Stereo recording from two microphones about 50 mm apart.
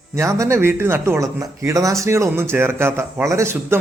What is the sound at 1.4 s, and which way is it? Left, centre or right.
Speech, right.